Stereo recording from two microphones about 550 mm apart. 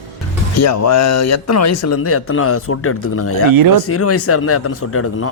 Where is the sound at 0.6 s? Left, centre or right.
Left.